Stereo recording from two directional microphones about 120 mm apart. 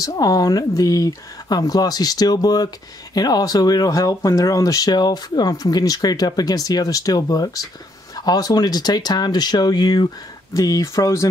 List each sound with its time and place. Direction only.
0.0 s speech: 30° left (ahead or behind)